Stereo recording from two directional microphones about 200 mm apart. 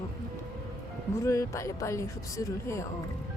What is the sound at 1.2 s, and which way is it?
Speech, 15° left (ahead or behind).